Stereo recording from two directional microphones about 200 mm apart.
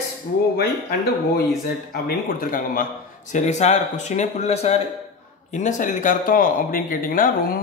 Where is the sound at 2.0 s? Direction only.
45° left (ahead or behind).